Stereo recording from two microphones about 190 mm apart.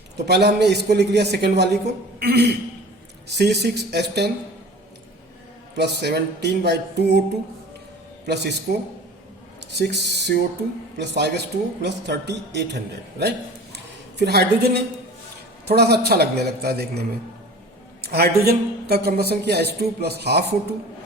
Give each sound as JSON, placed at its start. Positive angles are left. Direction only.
{"t": 0.3, "sound": "a man's voice", "side_deg": -60}
{"t": 5.7, "sound": "a man's voice", "side_deg": -65}
{"t": 8.3, "sound": "a man's voice", "side_deg": -60}
{"t": 9.7, "sound": "a man's voice", "side_deg": -65}
{"t": 13.7, "sound": "a sound", "side_deg": -60}
{"t": 15.6, "sound": "a man's voice", "side_deg": -60}
{"t": 18.0, "sound": "a man's voice", "side_deg": -55}